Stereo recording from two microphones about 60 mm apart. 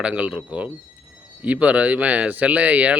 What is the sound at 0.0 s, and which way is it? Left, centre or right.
Speech, right.